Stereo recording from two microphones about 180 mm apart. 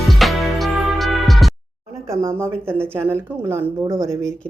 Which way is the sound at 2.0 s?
15° right (ahead or behind).